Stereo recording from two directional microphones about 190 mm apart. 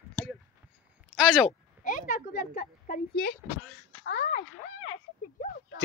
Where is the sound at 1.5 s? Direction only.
45° left (ahead or behind).